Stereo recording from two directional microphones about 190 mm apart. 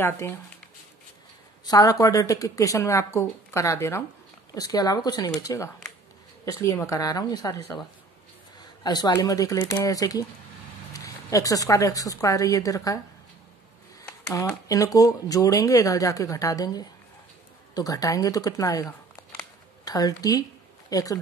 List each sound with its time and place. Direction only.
0.0 s speech: 10° left (ahead or behind)
1.7 s speech: 20° left (ahead or behind)
8.8 s speech: 20° left (ahead or behind)
14.2 s speech: 15° left (ahead or behind)